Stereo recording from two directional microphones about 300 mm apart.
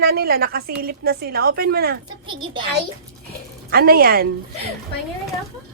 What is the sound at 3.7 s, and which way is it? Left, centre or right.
Speech, right.